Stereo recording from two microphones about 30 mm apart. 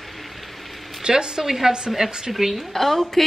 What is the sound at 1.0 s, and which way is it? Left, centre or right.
Speech, right.